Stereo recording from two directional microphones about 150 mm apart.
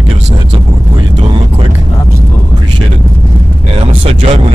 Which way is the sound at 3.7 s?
40° right (ahead or behind).